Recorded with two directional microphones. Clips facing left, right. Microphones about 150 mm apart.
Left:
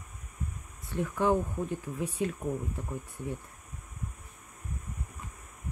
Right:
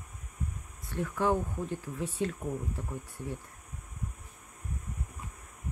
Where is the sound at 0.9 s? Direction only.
20° left (ahead or behind).